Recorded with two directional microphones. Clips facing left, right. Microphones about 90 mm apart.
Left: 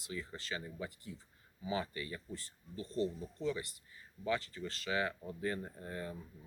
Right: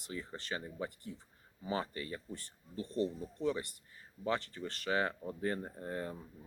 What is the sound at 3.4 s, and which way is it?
Speech, 55° right (ahead or behind).